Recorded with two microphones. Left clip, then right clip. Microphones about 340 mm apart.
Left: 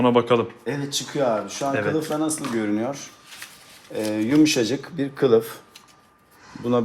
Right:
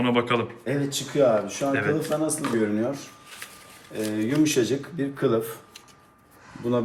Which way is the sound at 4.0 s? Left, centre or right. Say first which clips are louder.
Left 5 dB; left.